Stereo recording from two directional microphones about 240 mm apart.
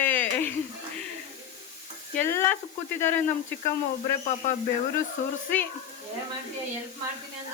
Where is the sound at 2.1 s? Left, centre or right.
Centre.